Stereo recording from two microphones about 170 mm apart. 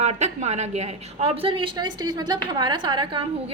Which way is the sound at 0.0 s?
40° right (ahead or behind).